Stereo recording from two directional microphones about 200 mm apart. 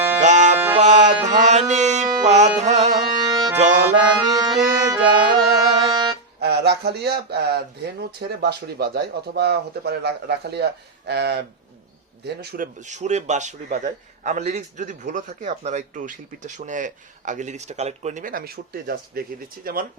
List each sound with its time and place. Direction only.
0.2 s music: 35° right (ahead or behind)
2.2 s a man's voice: 35° right (ahead or behind)
3.2 s music: 20° right (ahead or behind)
3.8 s accordion: 20° right (ahead or behind)
6.4 s a man's voice: 55° right (ahead or behind)
12.8 s a man's voice: 35° right (ahead or behind)